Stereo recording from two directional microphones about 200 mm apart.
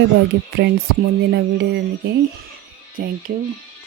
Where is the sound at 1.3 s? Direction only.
55° right (ahead or behind).